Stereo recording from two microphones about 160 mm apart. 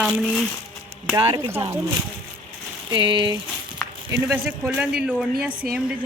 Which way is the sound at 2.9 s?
30° right (ahead or behind).